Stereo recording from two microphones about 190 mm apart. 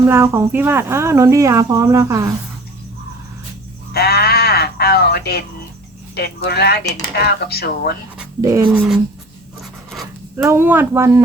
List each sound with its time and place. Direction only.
0.1 s speech: 15° right (ahead or behind)
3.9 s sheep: 55° left (ahead or behind)
6.1 s speech: 60° left (ahead or behind)
8.4 s speech: 15° right (ahead or behind)
10.3 s speech: 10° right (ahead or behind)